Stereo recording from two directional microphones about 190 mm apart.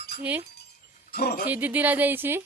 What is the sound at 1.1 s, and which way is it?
Speech, 50° left (ahead or behind).